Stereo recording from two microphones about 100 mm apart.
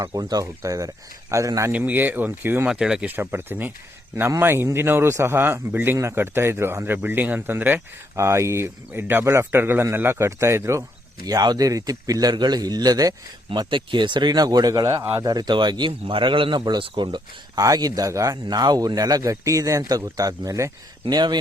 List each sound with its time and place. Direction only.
0.0 s speech: 40° right (ahead or behind)
1.7 s a man's voice: 20° right (ahead or behind)
2.6 s speech: 5° right (ahead or behind)
3.2 s a man's voice: 20° right (ahead or behind); by 13.1 s 40° right (ahead or behind)
13.5 s a man's voice: 55° right (ahead or behind)
17.6 s a man's voice: 40° right (ahead or behind)